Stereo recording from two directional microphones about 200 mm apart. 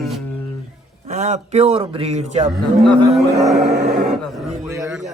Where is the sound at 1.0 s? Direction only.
35° right (ahead or behind).